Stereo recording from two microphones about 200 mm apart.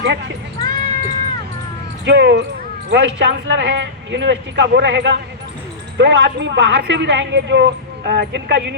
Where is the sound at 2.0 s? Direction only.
60° right (ahead or behind).